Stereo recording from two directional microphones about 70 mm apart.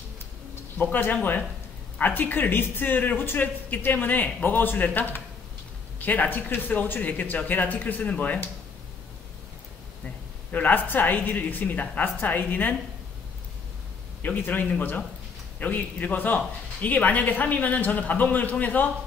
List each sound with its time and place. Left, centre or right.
2.0 s speech: left
10.5 s speech: left
14.2 s speech: left